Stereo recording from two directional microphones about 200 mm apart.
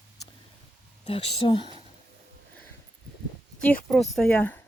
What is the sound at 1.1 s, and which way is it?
Speech, 30° left (ahead or behind).